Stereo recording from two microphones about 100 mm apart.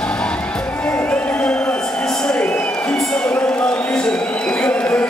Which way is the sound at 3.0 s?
10° left (ahead or behind).